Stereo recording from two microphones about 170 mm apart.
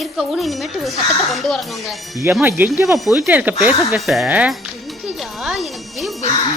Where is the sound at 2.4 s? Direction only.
10° right (ahead or behind).